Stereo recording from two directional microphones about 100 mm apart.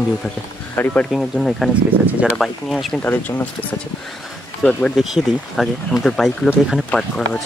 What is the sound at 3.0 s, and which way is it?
Speech, 20° left (ahead or behind).